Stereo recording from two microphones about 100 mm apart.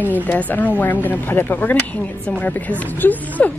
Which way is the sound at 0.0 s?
15° left (ahead or behind).